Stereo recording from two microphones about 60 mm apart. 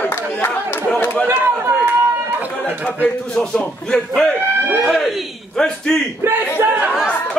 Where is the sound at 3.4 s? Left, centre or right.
Centre.